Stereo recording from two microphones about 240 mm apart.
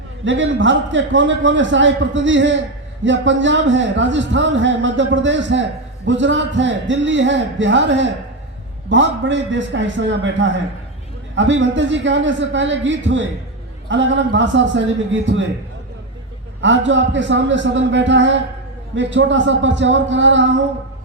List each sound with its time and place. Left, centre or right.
0.3 s a man's voice: right
16.6 s a man's voice: right